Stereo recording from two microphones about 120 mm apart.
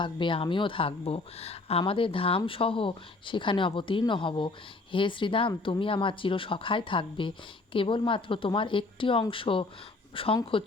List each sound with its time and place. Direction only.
0.0 s speech: 45° left (ahead or behind)